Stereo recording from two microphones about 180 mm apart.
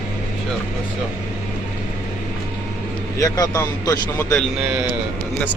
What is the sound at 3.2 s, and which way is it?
Speech, 20° left (ahead or behind).